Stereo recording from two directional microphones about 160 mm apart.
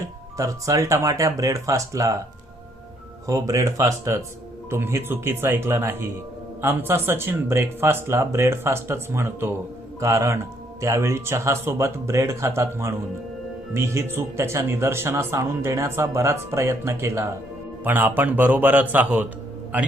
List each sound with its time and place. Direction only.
0.3 s speech: 20° right (ahead or behind)
3.2 s speech: 20° right (ahead or behind)